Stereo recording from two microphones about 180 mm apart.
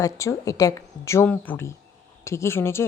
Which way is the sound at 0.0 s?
15° left (ahead or behind).